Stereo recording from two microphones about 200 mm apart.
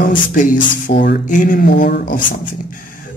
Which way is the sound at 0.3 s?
45° left (ahead or behind).